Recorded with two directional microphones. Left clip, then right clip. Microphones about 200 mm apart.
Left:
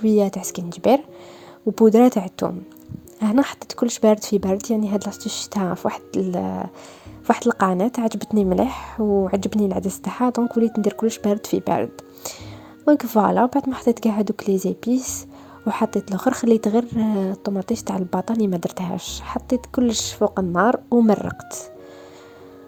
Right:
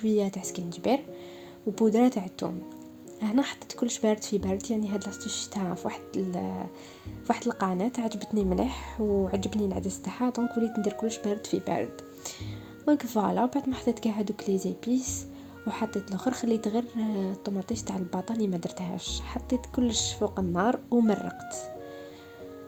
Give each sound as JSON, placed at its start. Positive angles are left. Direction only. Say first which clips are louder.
{"t": 0.0, "sound": "speech", "louder": "left 9 dB", "side_deg": 40}